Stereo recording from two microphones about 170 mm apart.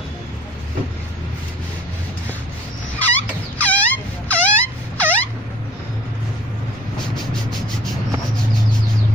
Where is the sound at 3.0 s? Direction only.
10° left (ahead or behind).